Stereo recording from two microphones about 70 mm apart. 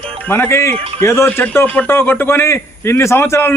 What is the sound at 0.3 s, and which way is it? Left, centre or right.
A man's voice, left.